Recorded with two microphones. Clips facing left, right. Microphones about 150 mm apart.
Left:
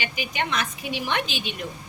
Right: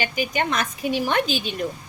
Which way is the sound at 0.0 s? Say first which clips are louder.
Right 5 dB; 45° right (ahead or behind).